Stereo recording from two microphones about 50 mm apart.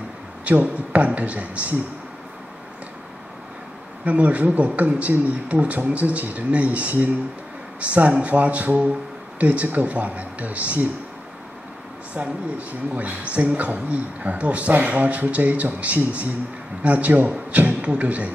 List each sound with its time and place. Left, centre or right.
0.5 s speech: right
4.0 s speech: right
12.1 s speech: right